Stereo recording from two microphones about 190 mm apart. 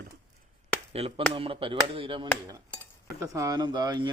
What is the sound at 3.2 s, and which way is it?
Speech, 15° right (ahead or behind).